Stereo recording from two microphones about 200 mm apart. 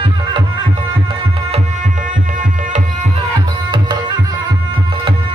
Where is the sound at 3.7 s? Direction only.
20° right (ahead or behind).